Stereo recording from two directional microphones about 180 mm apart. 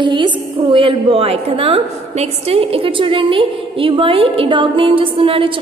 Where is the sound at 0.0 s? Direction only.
25° right (ahead or behind).